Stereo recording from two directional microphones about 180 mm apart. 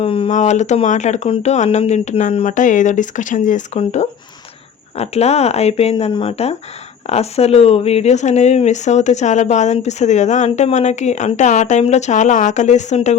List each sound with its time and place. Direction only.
0.0 s speech: 30° left (ahead or behind)
0.3 s speech: 40° left (ahead or behind)